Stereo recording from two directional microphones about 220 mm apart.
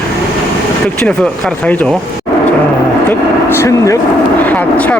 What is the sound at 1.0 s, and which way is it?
Speech, 5° left (ahead or behind).